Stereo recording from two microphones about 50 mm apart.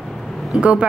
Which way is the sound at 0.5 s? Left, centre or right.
Centre.